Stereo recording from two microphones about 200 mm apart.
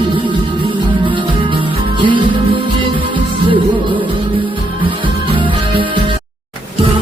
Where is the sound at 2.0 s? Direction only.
25° right (ahead or behind).